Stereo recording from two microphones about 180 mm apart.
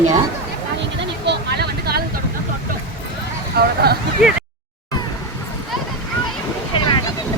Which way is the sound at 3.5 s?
60° right (ahead or behind).